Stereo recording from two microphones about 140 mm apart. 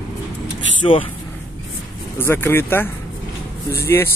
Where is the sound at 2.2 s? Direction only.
15° left (ahead or behind).